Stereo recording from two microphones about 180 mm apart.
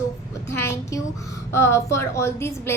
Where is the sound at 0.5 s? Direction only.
15° left (ahead or behind).